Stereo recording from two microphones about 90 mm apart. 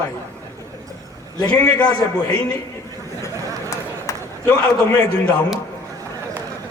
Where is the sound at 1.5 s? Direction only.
20° left (ahead or behind).